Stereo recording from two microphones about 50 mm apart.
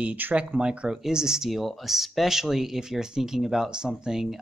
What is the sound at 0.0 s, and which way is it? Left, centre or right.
Speech, right.